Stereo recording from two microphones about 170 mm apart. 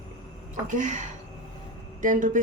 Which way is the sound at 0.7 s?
45° right (ahead or behind).